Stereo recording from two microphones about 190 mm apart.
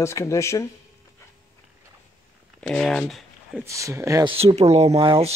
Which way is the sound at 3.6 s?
15° right (ahead or behind).